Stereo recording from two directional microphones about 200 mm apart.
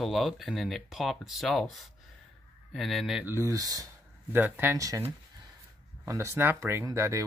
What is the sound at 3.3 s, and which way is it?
Speech, 15° right (ahead or behind).